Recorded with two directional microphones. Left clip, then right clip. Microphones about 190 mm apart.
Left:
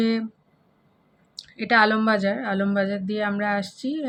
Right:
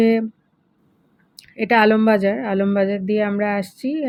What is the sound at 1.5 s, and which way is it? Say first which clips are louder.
Speech: right 4 dB; 25° right (ahead or behind).